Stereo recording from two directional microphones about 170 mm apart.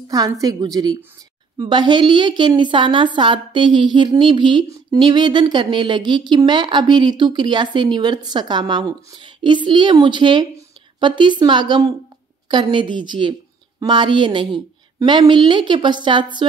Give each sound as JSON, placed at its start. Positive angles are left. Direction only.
{"t": 0.1, "sound": "a woman's voice", "side_deg": -20}